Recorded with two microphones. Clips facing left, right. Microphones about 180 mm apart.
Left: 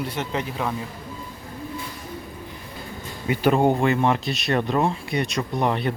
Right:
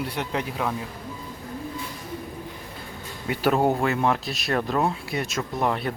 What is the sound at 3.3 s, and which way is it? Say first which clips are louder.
Speech: left 3 dB; centre (ahead or behind).